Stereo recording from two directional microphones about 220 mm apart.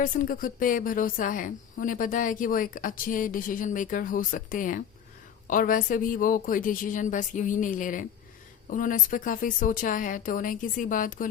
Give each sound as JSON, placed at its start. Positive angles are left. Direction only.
{"t": 0.0, "sound": "a woman's voice", "side_deg": 35}